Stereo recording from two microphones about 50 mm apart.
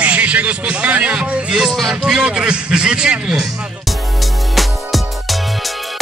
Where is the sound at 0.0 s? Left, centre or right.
Right.